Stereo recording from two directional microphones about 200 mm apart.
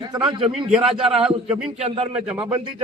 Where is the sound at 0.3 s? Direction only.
25° right (ahead or behind).